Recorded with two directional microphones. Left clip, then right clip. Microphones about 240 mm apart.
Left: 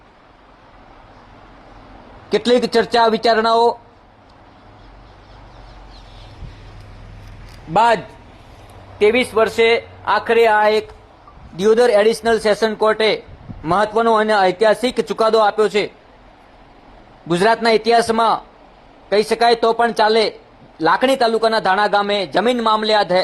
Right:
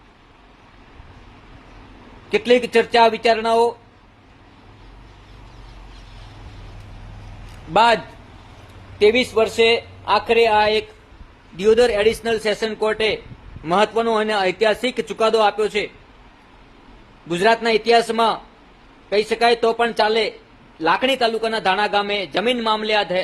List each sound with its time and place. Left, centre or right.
2.3 s speech: left
7.7 s a man's voice: centre
11.5 s a man's voice: centre
17.2 s a man's voice: centre